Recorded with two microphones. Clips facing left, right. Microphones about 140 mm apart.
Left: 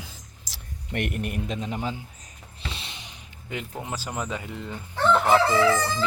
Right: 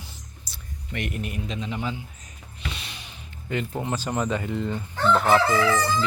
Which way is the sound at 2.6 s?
30° left (ahead or behind).